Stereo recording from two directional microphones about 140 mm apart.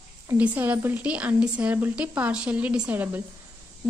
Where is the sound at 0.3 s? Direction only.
10° right (ahead or behind).